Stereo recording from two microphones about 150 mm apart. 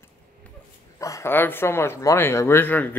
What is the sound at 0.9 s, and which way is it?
Speech, 20° left (ahead or behind).